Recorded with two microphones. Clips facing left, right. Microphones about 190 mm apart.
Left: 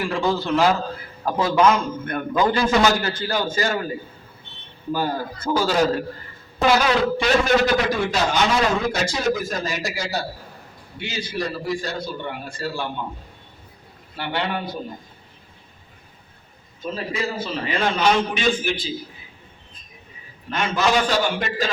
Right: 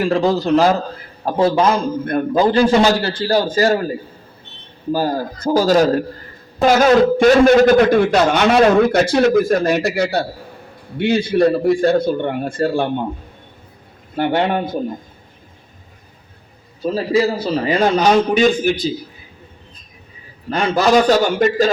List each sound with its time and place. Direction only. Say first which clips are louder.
0.0 s a man's voice: right 7 dB; 35° right (ahead or behind); by 12.9 s 50° right (ahead or behind)
14.2 s a man's voice: right 9 dB; 45° right (ahead or behind)
16.8 s a man's voice: right 10 dB; 35° right (ahead or behind)
20.5 s a man's voice: right 7 dB; 35° right (ahead or behind)